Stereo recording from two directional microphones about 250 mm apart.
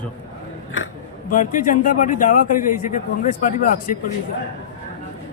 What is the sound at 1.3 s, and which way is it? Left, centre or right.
A man's voice, left.